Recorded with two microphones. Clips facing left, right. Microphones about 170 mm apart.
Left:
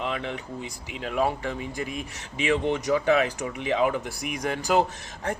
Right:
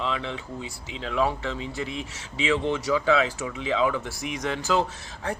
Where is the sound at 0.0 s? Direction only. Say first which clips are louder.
Even; 55° left (ahead or behind).